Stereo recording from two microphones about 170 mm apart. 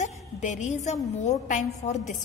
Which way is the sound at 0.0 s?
45° left (ahead or behind).